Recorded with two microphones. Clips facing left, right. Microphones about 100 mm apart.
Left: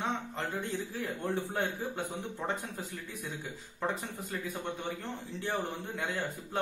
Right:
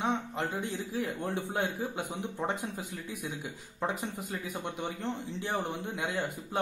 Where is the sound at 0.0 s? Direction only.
15° right (ahead or behind).